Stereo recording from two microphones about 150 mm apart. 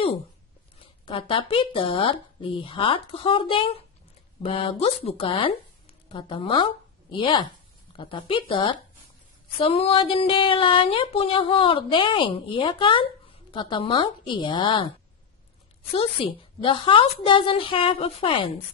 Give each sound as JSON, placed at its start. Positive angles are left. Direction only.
{"t": 1.0, "sound": "a woman's voice", "side_deg": 35}
{"t": 15.9, "sound": "speech", "side_deg": 40}